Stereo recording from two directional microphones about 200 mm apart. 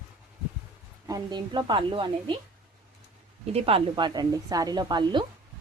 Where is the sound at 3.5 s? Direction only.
30° right (ahead or behind).